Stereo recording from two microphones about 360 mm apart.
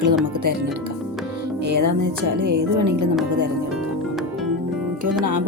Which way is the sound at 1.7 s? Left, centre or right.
Right.